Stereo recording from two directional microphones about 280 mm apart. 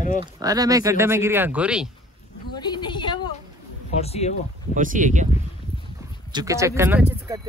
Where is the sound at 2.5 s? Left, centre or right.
Centre.